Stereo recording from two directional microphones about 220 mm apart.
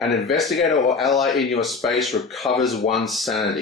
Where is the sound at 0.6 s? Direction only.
30° left (ahead or behind).